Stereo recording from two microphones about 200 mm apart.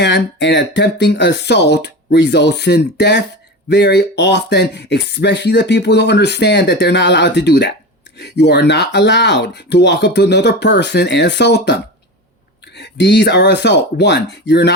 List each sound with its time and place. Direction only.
0.0 s speech: 60° left (ahead or behind)